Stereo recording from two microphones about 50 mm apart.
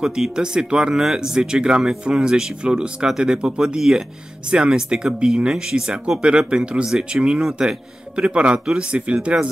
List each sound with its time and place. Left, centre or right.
0.0 s speech: centre
3.1 s speech: centre